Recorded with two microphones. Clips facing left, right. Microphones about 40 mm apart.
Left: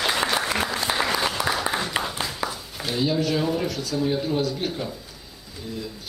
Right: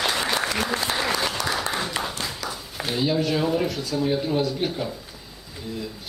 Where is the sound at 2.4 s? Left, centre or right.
Left.